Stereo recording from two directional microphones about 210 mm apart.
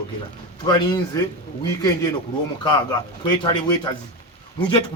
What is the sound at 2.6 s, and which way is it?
A man's voice, 20° left (ahead or behind).